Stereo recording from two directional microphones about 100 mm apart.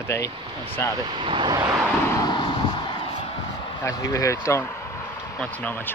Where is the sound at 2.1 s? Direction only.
45° left (ahead or behind).